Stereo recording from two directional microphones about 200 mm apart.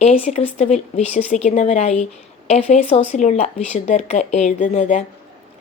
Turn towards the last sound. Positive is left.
turn(degrees=40)  # may be behind; listen again after turning